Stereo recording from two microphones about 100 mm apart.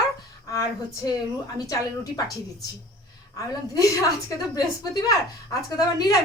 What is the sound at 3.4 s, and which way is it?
A woman's voice, 35° left (ahead or behind).